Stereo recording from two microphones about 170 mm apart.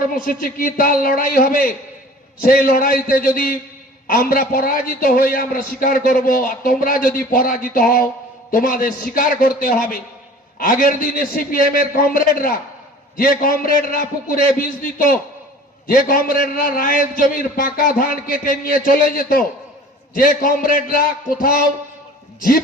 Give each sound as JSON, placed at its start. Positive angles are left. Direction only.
{"t": 0.3, "sound": "a man's voice", "side_deg": 55}